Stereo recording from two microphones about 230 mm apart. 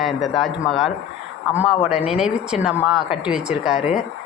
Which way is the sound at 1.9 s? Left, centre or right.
Left.